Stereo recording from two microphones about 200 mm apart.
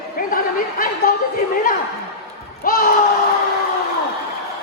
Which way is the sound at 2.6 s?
45° left (ahead or behind).